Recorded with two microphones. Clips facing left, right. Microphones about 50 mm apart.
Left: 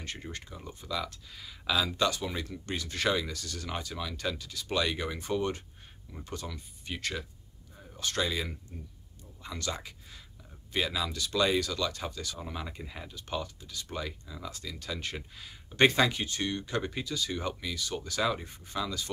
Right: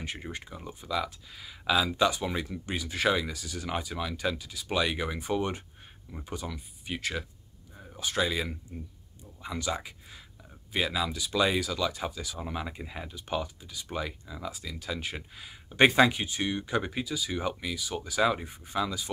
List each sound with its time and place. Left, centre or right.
0.0 s speech: centre